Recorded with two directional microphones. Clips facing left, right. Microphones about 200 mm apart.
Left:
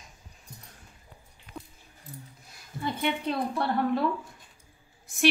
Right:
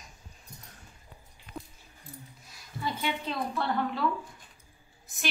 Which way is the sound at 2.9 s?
55° left (ahead or behind).